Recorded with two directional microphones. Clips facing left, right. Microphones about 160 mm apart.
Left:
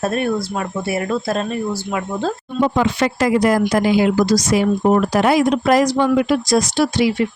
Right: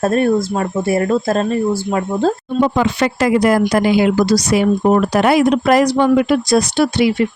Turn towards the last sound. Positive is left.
turn(degrees=-60)  # may be behind; listen again after turning